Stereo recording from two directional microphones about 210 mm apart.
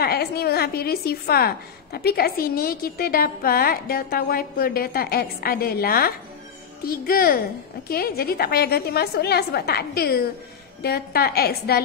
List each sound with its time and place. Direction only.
0.0 s a woman's voice: 50° left (ahead or behind)